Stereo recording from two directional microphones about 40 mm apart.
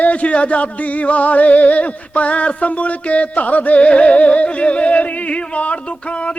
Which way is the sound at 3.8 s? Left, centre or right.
Left.